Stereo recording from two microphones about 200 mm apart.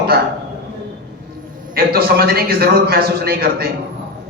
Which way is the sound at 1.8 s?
50° right (ahead or behind).